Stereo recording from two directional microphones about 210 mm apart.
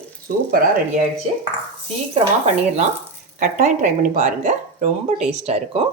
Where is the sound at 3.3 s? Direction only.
40° right (ahead or behind).